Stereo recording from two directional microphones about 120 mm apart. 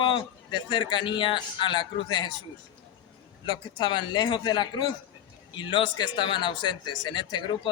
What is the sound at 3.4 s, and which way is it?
A man's voice, 40° left (ahead or behind).